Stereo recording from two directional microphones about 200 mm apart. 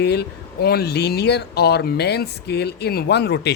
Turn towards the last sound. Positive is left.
turn(degrees=55)  # may be behind; listen again after turning